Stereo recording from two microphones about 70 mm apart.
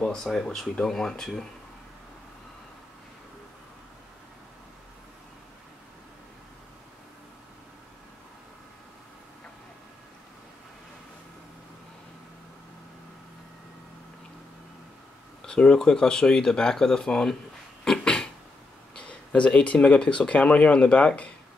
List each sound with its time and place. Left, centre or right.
0.0 s speech: centre
15.4 s speech: centre
17.8 s a sound: centre
18.9 s speech: centre